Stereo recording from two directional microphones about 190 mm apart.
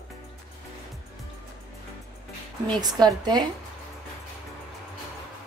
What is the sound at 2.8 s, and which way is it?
Speech, 20° right (ahead or behind).